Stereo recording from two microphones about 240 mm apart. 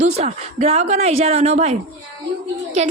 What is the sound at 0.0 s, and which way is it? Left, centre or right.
A woman's voice, right.